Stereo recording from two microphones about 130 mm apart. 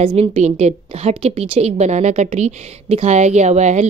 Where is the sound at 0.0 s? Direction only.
45° right (ahead or behind).